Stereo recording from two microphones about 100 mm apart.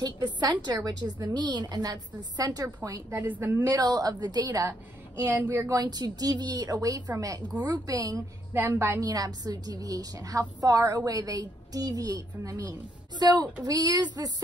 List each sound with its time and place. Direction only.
0.0 s a woman's voice: 45° right (ahead or behind)
3.1 s a woman's voice: 20° right (ahead or behind)
3.6 s a woman's voice: 40° right (ahead or behind)
5.1 s a woman's voice: 20° right (ahead or behind)
5.7 s a woman's voice: 40° right (ahead or behind)
8.5 s a woman's voice: 20° right (ahead or behind)
9.0 s a woman's voice: 40° right (ahead or behind)